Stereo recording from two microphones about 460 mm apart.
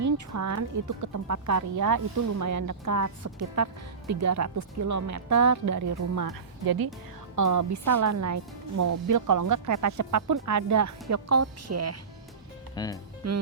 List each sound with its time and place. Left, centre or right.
0.0 s a woman's voice: right
12.7 s speech: centre
13.2 s a woman's voice: right